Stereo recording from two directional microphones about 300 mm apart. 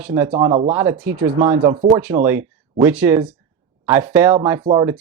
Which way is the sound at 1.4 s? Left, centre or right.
Centre.